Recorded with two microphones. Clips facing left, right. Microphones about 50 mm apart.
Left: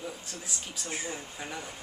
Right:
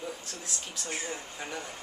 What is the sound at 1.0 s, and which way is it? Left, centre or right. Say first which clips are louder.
Speech: even; centre.